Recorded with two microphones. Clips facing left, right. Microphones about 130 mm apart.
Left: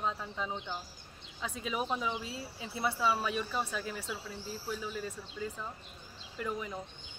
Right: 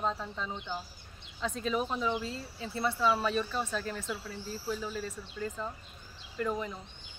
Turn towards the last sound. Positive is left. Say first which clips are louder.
# right 4 dB
turn(degrees=5)  # may be behind; listen again after turning